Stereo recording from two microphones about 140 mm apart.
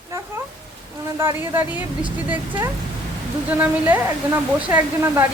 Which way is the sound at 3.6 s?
15° right (ahead or behind).